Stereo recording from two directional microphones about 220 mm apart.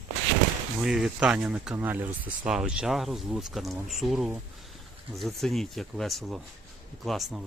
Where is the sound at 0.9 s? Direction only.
Centre (ahead or behind).